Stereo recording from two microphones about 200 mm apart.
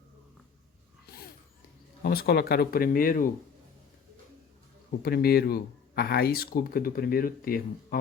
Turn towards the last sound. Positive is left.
turn(degrees=45)  # may be behind; listen again after turning